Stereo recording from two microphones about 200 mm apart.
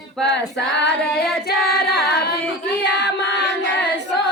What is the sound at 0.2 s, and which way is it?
Female singing, 60° left (ahead or behind).